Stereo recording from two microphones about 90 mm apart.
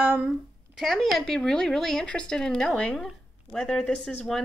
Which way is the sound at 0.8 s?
Centre (ahead or behind).